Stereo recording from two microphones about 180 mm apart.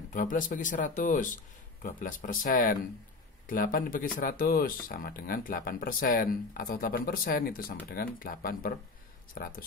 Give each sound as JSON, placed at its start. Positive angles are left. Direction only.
{"t": 0.1, "sound": "speech", "side_deg": 45}